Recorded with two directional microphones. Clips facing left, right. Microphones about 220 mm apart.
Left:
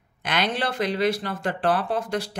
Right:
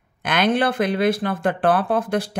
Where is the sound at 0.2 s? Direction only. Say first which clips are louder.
Right 7 dB; 50° right (ahead or behind).